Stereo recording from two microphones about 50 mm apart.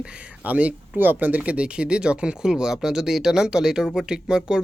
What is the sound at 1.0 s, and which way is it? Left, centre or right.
Speech, right.